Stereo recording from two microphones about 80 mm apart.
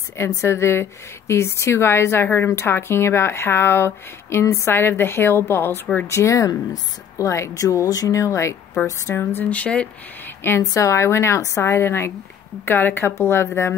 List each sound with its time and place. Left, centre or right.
0.2 s speech: left; by 9.8 s centre
10.2 s speech: left
10.6 s speech: left